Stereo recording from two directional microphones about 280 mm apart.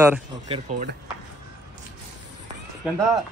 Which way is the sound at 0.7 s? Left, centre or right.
Right.